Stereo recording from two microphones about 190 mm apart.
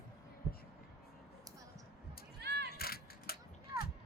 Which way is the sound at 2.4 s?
60° right (ahead or behind).